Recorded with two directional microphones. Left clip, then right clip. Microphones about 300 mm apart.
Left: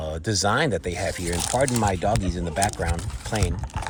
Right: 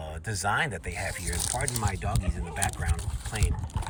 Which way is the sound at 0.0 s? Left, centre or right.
Centre.